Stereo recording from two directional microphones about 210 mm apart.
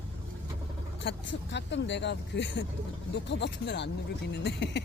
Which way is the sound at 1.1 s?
60° left (ahead or behind).